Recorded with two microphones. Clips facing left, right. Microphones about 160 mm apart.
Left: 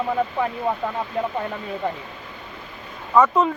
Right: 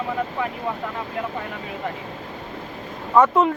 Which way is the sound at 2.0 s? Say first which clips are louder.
Right 5 dB; 35° right (ahead or behind).